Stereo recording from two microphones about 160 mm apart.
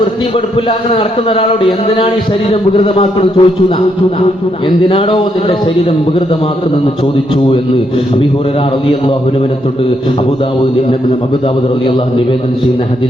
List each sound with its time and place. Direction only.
0.9 s a man's voice: 35° left (ahead or behind)
2.5 s a man's voice: 35° left (ahead or behind)
4.9 s a man's voice: 35° left (ahead or behind)